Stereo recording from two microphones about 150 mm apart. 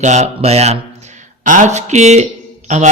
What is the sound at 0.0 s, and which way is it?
A man's voice, 50° right (ahead or behind).